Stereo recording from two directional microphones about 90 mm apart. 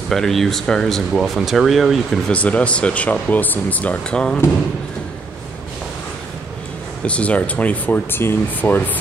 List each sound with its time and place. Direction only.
0.1 s speech: 5° left (ahead or behind)
2.2 s speech: 15° left (ahead or behind)
7.1 s speech: 15° left (ahead or behind)